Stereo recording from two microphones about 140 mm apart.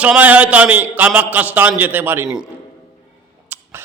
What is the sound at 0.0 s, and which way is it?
A man's voice, 10° right (ahead or behind).